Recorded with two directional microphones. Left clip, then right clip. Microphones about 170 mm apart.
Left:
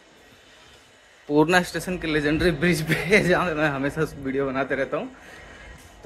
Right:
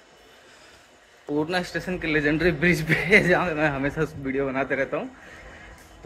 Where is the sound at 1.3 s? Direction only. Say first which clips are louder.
Left 7 dB; 60° left (ahead or behind).